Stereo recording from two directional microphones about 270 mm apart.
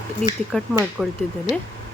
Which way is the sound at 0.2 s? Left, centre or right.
Left.